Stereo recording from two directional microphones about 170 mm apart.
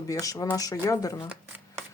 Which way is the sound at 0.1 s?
20° left (ahead or behind).